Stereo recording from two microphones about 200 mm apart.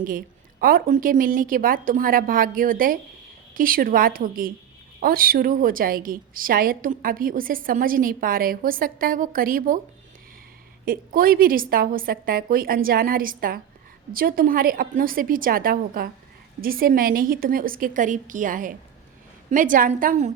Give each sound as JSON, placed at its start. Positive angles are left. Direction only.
{"t": 0.6, "sound": "a woman's voice", "side_deg": -45}
{"t": 10.8, "sound": "a woman's voice", "side_deg": -45}